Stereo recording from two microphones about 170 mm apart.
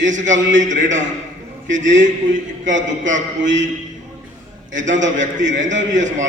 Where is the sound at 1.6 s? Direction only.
90° right.